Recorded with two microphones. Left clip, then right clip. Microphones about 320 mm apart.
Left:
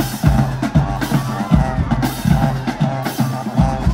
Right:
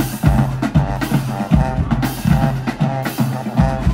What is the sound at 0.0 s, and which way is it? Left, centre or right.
Music, centre.